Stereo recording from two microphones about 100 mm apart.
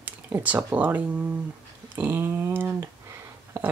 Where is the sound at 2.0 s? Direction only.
25° right (ahead or behind).